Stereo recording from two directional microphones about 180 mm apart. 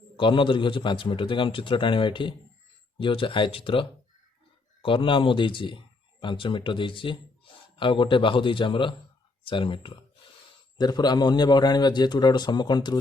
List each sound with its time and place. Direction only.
0.2 s a man's voice: 30° left (ahead or behind)